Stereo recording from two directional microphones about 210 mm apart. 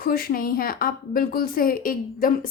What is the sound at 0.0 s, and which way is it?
A woman's voice, 45° left (ahead or behind).